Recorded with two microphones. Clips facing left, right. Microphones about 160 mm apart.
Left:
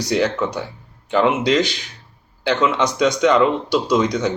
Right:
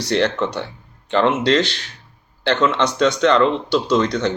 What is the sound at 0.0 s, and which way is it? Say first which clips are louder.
Speech: even; 10° left (ahead or behind).